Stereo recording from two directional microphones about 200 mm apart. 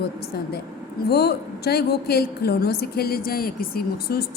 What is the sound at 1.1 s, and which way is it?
A woman's voice, 50° left (ahead or behind).